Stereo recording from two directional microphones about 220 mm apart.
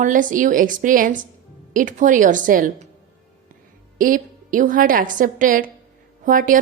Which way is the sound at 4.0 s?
35° right (ahead or behind).